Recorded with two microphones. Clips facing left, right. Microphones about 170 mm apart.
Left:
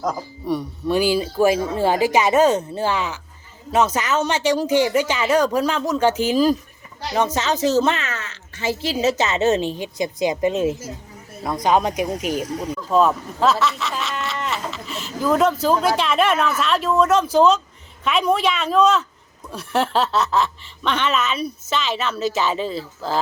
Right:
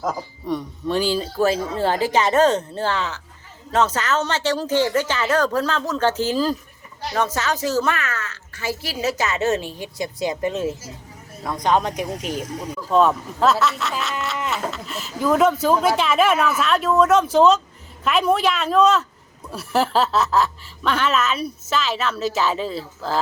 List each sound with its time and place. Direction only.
0.0 s speech: 5° right (ahead or behind)
0.4 s speech: 10° left (ahead or behind)
11.4 s speech: 10° left (ahead or behind)
12.9 s a sound: centre (ahead or behind)
15.6 s speech: centre (ahead or behind)